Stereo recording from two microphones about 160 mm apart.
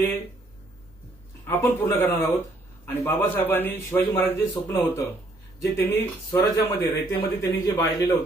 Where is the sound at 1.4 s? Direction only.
15° left (ahead or behind).